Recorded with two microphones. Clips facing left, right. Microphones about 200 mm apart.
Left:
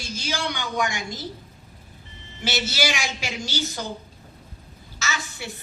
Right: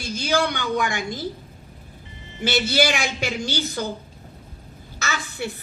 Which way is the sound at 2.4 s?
55° right (ahead or behind).